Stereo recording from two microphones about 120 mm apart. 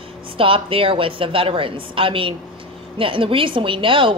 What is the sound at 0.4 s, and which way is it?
A woman's voice, 50° right (ahead or behind).